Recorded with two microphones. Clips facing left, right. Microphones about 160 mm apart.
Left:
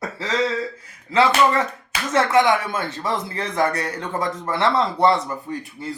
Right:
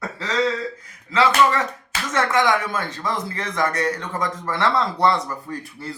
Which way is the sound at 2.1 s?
25° left (ahead or behind).